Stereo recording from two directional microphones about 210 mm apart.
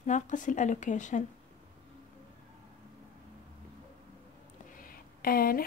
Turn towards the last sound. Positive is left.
turn(degrees=45)  # may be behind; listen again after turning